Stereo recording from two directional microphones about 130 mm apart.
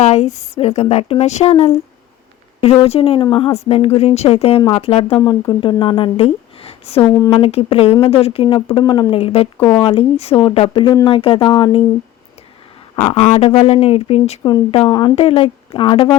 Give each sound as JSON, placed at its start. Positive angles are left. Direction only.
{"t": 0.0, "sound": "speech", "side_deg": 55}
{"t": 2.7, "sound": "speech", "side_deg": 45}
{"t": 9.1, "sound": "speech", "side_deg": 50}
{"t": 13.0, "sound": "speech", "side_deg": 50}
{"t": 14.4, "sound": "speech", "side_deg": 35}
{"t": 15.1, "sound": "speech", "side_deg": 45}